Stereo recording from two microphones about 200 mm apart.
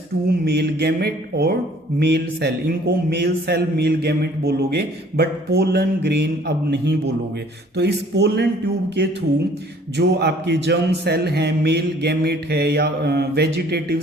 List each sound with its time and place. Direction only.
0.3 s a sound: 55° right (ahead or behind)
2.0 s a man's voice: 55° right (ahead or behind)
10.0 s a man's voice: 55° right (ahead or behind)